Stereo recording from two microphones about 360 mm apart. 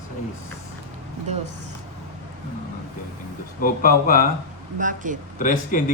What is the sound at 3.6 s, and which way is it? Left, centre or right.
Speech, left.